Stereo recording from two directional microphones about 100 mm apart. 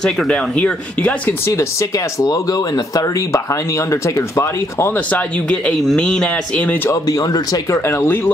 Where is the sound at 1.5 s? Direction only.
30° left (ahead or behind).